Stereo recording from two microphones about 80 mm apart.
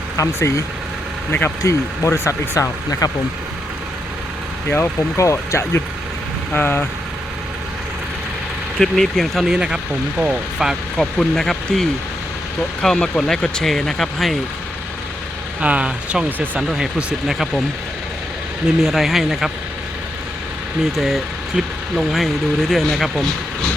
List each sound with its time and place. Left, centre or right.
0.2 s speech: left
1.3 s speech: left
1.6 s speech: left
4.7 s speech: left
6.5 s speech: left
8.8 s speech: centre
9.5 s speech: centre
10.9 s speech: centre
15.6 s speech: centre
18.8 s speech: centre
20.9 s speech: centre